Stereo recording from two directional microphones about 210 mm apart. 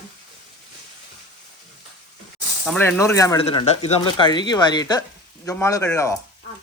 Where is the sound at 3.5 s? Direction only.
30° left (ahead or behind).